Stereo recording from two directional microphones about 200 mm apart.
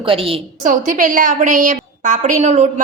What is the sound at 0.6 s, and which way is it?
A woman's voice, 40° right (ahead or behind).